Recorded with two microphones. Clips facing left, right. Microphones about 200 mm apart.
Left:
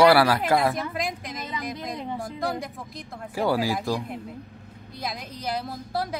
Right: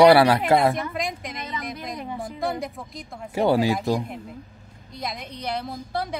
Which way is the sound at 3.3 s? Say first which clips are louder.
Right 4 dB; 25° right (ahead or behind).